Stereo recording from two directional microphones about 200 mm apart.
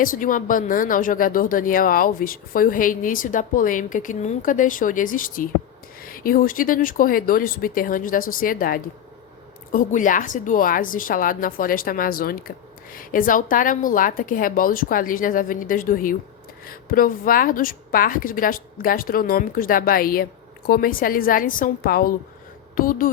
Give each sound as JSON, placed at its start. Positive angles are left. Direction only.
{"t": 0.0, "sound": "a woman's voice", "side_deg": 45}